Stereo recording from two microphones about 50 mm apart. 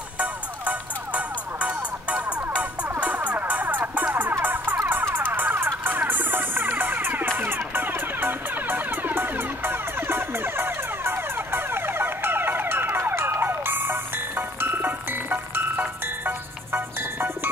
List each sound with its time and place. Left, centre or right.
0.2 s music: right